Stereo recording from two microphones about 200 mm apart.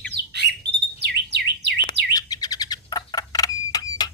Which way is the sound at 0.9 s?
55° right (ahead or behind).